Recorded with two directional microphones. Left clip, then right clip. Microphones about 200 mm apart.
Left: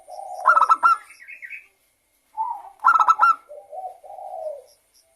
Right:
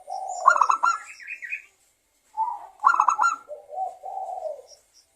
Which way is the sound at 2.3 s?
20° right (ahead or behind).